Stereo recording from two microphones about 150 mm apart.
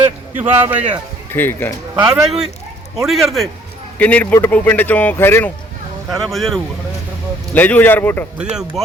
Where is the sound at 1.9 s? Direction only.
25° right (ahead or behind).